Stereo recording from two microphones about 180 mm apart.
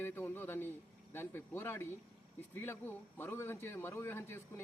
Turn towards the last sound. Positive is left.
turn(degrees=15)  # may be behind; listen again after turning